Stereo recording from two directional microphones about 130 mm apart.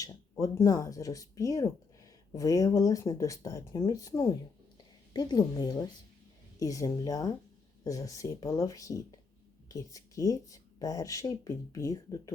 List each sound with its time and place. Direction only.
0.0 s speech: 25° left (ahead or behind)